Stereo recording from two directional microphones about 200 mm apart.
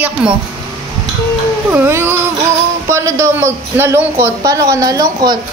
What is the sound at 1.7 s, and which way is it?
Speech, 10° right (ahead or behind).